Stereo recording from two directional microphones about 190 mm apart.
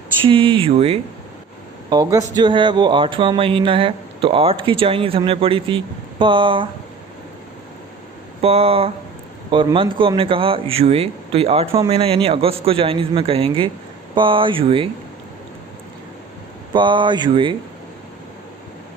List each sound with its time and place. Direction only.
0.3 s speech: 25° right (ahead or behind)
1.9 s speech: 20° right (ahead or behind)
8.4 s speech: 30° right (ahead or behind)
16.7 s speech: 25° right (ahead or behind)